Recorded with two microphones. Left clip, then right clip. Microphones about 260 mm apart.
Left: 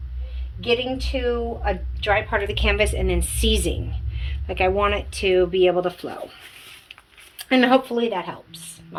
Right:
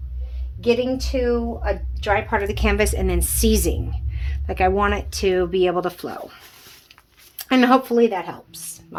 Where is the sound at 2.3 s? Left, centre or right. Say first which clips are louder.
Right 1 dB; right.